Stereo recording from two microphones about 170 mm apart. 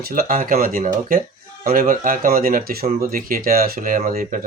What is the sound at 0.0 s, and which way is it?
Speech, 60° right (ahead or behind).